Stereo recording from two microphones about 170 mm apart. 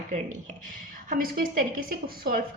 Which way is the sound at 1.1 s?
55° right (ahead or behind).